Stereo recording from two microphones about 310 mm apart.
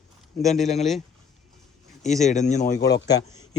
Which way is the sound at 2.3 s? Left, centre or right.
Left.